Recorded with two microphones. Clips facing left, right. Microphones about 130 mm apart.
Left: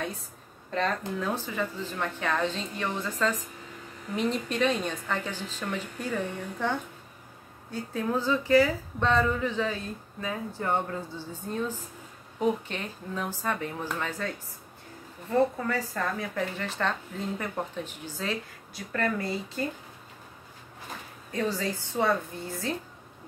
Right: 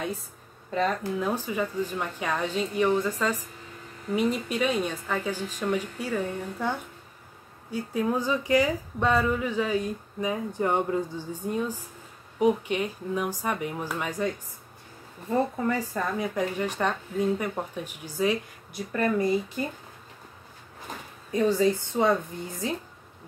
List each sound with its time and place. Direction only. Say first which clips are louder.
0.7 s speech: right 2 dB; 10° right (ahead or behind)
7.7 s speech: right 3 dB; 10° right (ahead or behind)
21.3 s a woman's voice: right 7 dB; 20° right (ahead or behind)